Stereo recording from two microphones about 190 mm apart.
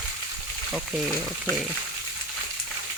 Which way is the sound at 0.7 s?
Centre (ahead or behind).